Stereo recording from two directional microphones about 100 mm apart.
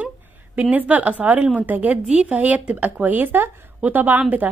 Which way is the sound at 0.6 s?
15° right (ahead or behind).